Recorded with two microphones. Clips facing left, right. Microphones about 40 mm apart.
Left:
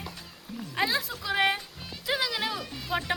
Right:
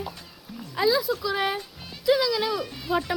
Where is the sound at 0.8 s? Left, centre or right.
Left.